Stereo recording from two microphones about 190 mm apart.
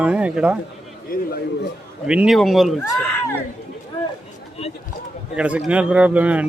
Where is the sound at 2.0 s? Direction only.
5° right (ahead or behind).